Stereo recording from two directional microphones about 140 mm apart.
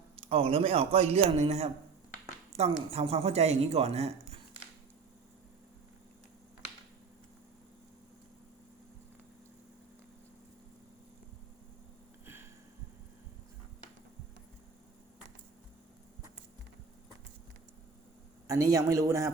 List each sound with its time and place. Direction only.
0.2 s speech: 45° right (ahead or behind)
12.2 s a sound: 15° right (ahead or behind)
18.4 s speech: 25° right (ahead or behind)